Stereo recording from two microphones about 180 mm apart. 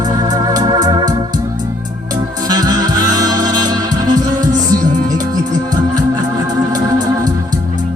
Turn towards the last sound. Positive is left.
turn(degrees=-20)  # may be behind; listen again after turning